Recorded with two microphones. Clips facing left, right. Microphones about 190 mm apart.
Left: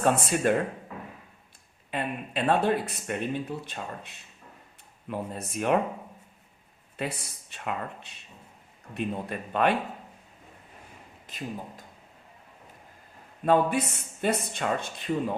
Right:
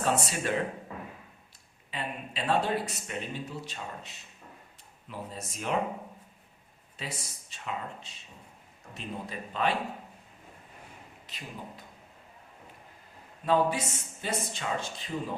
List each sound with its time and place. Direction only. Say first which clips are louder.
0.0 s speech: left 5 dB; 55° left (ahead or behind)
1.9 s speech: left 6 dB; 55° left (ahead or behind)
6.9 s speech: left 7 dB; 60° left (ahead or behind)
11.3 s speech: left 7 dB; 45° left (ahead or behind)
13.4 s speech: left 3 dB; 55° left (ahead or behind)